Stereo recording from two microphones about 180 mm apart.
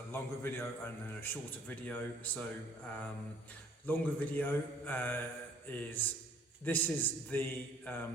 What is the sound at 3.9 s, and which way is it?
A man's voice, 10° left (ahead or behind).